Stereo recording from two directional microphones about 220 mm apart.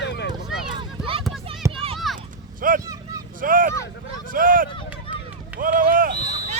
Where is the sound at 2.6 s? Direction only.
40° right (ahead or behind).